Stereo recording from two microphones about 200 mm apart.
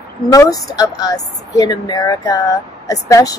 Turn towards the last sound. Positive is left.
turn(degrees=15)  # may be behind; listen again after turning